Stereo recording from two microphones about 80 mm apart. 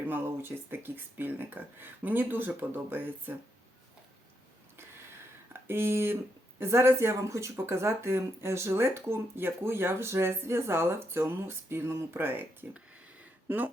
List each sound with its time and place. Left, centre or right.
0.1 s speech: right
5.5 s speech: right
12.7 s a sound: centre